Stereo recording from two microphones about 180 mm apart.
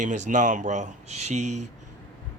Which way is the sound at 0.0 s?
40° right (ahead or behind).